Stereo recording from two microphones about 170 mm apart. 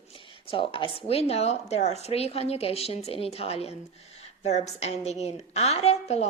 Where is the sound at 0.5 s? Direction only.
30° left (ahead or behind).